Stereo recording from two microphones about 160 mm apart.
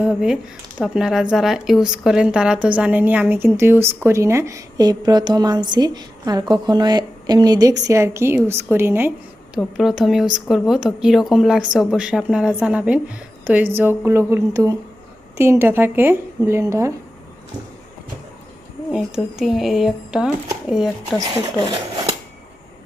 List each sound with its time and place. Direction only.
0.0 s a woman's voice: 5° right (ahead or behind)
9.6 s a woman's voice: centre (ahead or behind); by 16.9 s 20° right (ahead or behind)
18.9 s a woman's voice: 5° right (ahead or behind)